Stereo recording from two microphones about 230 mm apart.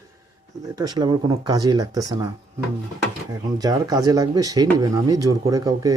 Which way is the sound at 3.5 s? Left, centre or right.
Centre.